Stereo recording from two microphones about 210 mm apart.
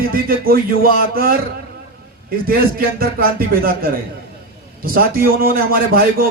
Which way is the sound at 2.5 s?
45° right (ahead or behind).